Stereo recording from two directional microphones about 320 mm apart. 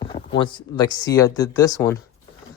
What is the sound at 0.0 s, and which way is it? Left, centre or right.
Speech, centre.